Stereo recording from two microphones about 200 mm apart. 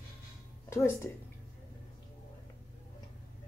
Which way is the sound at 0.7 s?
15° left (ahead or behind).